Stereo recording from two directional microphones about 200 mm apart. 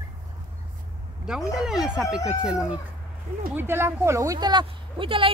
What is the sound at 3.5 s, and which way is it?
A woman's voice, 10° right (ahead or behind).